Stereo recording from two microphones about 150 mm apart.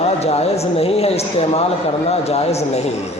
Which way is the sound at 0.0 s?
45° left (ahead or behind).